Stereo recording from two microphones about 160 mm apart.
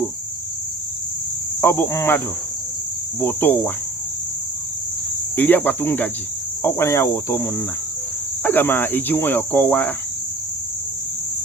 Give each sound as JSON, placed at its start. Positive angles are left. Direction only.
{"t": 1.6, "sound": "cricket", "side_deg": 15}
{"t": 5.4, "sound": "cricket", "side_deg": 10}